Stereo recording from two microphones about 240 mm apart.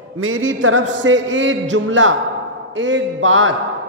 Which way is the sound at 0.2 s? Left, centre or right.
Right.